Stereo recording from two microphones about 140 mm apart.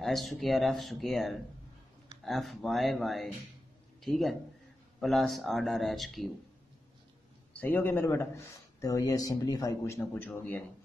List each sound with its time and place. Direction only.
0.0 s speech: centre (ahead or behind)
7.5 s a man's voice: 15° left (ahead or behind)